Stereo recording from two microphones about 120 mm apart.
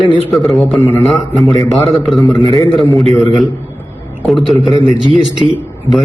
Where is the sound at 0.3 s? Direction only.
Centre (ahead or behind).